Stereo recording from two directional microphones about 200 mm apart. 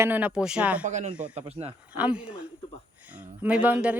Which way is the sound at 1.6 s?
25° right (ahead or behind).